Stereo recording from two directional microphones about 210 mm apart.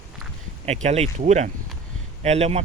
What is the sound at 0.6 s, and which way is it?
Speech, 30° right (ahead or behind).